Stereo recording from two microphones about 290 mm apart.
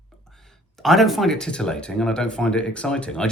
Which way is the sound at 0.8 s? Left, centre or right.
Centre.